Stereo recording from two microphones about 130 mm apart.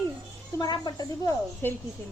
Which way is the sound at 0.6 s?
35° left (ahead or behind).